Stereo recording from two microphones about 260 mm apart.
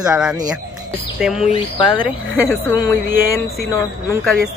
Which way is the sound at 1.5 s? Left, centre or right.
Centre.